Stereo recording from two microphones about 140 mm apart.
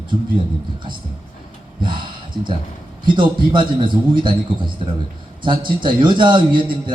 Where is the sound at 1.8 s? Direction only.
35° right (ahead or behind).